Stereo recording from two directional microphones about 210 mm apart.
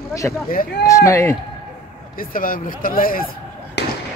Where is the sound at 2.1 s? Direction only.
40° left (ahead or behind).